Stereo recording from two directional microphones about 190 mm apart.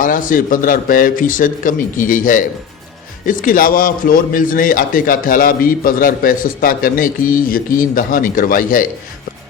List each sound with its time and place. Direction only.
0.0 s a man's voice: 45° left (ahead or behind)